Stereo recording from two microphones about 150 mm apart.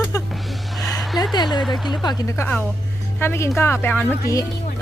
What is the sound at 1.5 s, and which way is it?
Speech, centre (ahead or behind).